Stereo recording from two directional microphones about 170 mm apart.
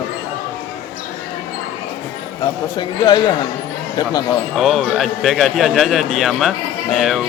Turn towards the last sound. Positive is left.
turn(degrees=0)  # may be behind; listen again after turning